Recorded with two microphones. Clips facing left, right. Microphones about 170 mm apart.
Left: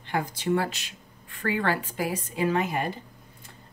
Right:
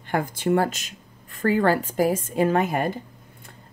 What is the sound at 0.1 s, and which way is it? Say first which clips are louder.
Speech: right 4 dB; 50° right (ahead or behind).